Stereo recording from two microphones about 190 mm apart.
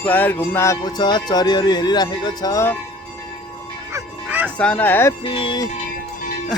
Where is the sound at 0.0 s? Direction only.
10° left (ahead or behind).